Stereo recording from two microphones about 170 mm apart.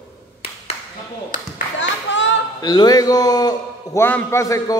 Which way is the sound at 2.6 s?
25° left (ahead or behind).